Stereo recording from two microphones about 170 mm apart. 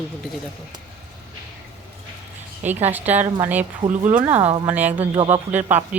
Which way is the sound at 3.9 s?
45° right (ahead or behind).